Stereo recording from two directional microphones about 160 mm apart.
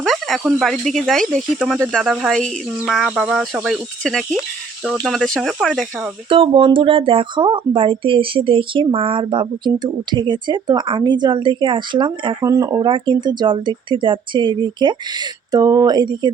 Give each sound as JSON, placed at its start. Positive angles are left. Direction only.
{"t": 0.0, "sound": "speech", "side_deg": 0}
{"t": 6.2, "sound": "speech", "side_deg": -35}